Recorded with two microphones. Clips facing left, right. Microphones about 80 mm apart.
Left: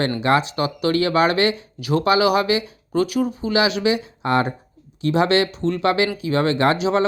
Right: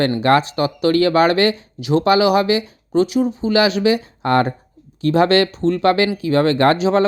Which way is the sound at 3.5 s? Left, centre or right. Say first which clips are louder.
Right 4 dB; right.